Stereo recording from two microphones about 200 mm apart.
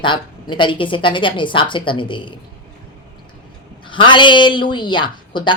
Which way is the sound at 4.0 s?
25° left (ahead or behind).